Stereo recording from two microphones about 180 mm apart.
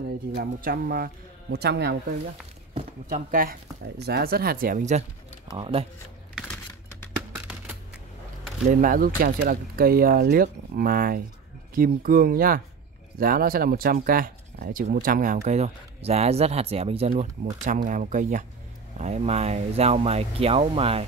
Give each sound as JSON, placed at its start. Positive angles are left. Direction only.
{"t": 0.4, "sound": "speech", "side_deg": -55}
{"t": 2.7, "sound": "a sound", "side_deg": -35}
{"t": 3.3, "sound": "speech", "side_deg": -55}
{"t": 5.6, "sound": "speech", "side_deg": -30}
{"t": 7.3, "sound": "a sound", "side_deg": -10}
{"t": 8.6, "sound": "speech", "side_deg": -50}
{"t": 17.6, "sound": "speech", "side_deg": -45}